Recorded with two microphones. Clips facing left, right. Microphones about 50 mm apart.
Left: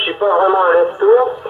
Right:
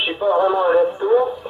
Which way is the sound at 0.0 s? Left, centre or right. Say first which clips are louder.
Left 4 dB; left.